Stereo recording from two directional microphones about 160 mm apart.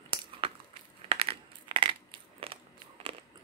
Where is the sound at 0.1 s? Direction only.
35° right (ahead or behind).